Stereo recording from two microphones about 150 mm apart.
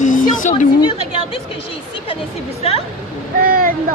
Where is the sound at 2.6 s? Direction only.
40° left (ahead or behind).